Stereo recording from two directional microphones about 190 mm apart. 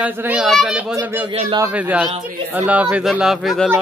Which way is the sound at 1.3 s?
30° right (ahead or behind).